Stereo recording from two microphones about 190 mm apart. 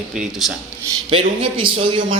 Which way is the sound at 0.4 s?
Centre (ahead or behind).